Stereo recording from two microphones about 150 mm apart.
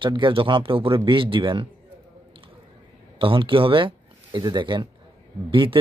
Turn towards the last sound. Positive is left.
turn(degrees=-35)  # may be behind; listen again after turning